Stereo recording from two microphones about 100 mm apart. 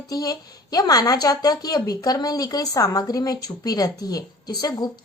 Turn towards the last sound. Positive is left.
turn(degrees=40)  # may be behind; listen again after turning